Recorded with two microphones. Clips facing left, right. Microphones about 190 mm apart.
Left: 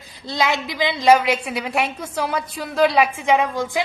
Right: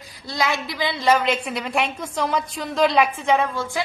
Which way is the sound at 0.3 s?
20° left (ahead or behind).